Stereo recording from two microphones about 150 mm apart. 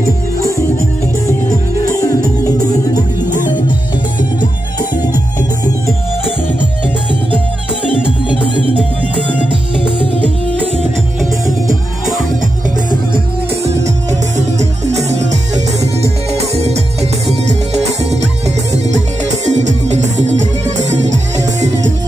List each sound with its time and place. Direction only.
0.4 s music: 20° left (ahead or behind)
1.9 s music: 20° left (ahead or behind)
11.4 s music: 20° right (ahead or behind)
14.3 s music: 50° right (ahead or behind)
18.1 s music: 45° right (ahead or behind)